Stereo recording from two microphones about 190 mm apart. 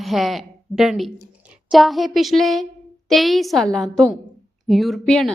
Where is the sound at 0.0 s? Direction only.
Centre (ahead or behind).